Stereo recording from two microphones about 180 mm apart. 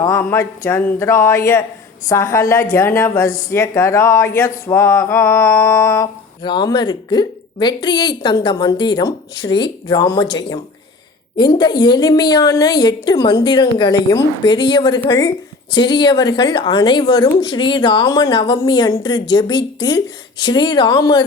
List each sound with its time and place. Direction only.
0.0 s a woman's voice: 15° left (ahead or behind)
6.4 s speech: 25° left (ahead or behind)